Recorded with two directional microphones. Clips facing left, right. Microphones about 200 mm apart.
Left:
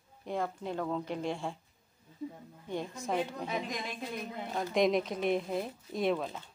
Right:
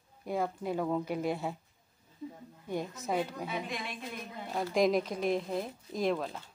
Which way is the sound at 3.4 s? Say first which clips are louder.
Left 1 dB; 40° left (ahead or behind).